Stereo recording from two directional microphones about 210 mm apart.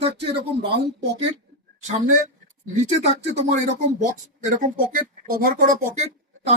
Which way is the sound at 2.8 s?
35° right (ahead or behind).